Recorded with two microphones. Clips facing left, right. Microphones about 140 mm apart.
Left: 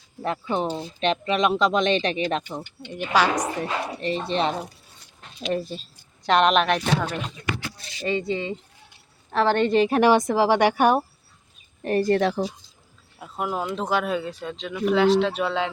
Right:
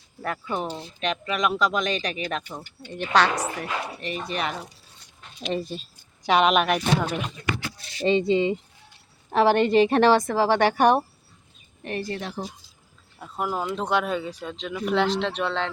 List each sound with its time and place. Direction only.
0.2 s speech: 20° left (ahead or behind)
2.8 s speech: 10° left (ahead or behind)
3.6 s speech: 30° left (ahead or behind)
5.5 s speech: centre (ahead or behind)
8.0 s a woman's voice: 20° right (ahead or behind); by 10.0 s centre (ahead or behind)
10.0 s speech: 15° left (ahead or behind)
11.8 s speech: 40° left (ahead or behind)
12.1 s speech: 90° left
13.1 s speech: 5° left (ahead or behind)